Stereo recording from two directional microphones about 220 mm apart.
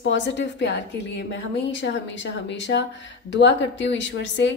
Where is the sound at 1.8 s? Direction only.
55° left (ahead or behind).